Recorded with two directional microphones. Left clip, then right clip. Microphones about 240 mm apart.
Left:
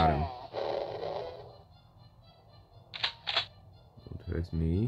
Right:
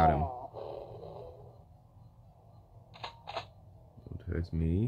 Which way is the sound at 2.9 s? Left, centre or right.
Left.